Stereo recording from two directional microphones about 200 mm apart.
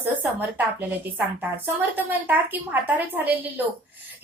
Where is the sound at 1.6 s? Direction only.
10° right (ahead or behind).